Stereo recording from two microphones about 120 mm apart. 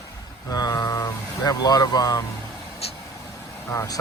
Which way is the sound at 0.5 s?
35° left (ahead or behind).